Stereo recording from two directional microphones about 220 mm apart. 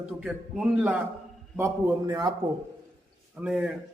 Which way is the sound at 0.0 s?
5° right (ahead or behind).